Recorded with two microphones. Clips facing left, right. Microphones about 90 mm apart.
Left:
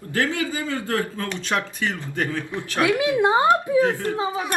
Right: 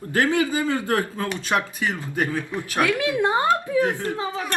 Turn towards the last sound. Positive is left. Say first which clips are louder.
# left 3 dB
turn(degrees=15)  # may be behind; listen again after turning